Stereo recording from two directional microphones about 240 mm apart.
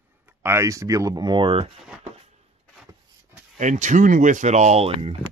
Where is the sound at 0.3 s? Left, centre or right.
Centre.